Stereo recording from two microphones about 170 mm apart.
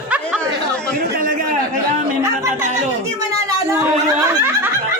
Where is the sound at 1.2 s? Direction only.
55° right (ahead or behind).